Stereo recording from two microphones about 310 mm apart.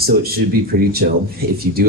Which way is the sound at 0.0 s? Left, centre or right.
Right.